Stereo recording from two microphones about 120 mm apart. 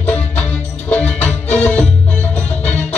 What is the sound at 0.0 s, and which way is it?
Music, 10° left (ahead or behind).